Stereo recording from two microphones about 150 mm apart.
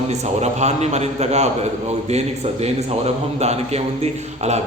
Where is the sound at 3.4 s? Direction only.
45° right (ahead or behind).